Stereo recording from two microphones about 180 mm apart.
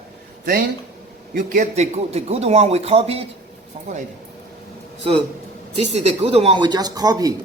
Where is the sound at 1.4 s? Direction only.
45° right (ahead or behind).